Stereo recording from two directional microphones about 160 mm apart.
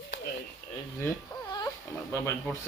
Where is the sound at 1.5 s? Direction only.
25° left (ahead or behind).